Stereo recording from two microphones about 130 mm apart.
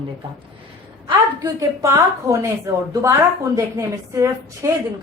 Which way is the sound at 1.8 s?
20° right (ahead or behind).